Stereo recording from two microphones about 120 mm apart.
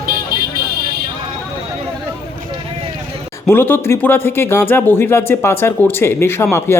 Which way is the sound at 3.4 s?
20° left (ahead or behind).